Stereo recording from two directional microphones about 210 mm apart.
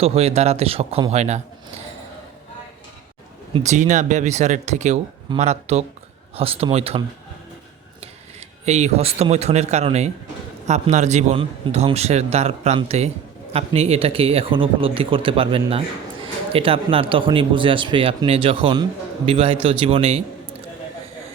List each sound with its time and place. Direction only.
0.0 s speech: 30° right (ahead or behind)
3.5 s a man's voice: 35° right (ahead or behind)
8.0 s a man's voice: 30° right (ahead or behind)